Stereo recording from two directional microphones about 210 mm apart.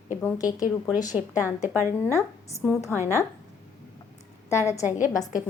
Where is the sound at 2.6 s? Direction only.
10° left (ahead or behind).